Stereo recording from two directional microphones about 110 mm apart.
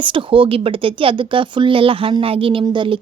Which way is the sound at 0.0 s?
50° right (ahead or behind).